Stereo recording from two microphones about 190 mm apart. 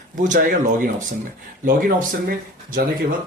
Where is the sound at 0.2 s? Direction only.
40° right (ahead or behind).